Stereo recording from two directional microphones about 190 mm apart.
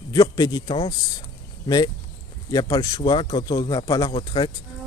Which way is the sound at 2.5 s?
20° left (ahead or behind).